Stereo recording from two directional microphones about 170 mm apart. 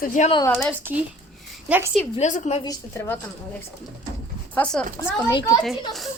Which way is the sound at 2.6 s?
15° left (ahead or behind).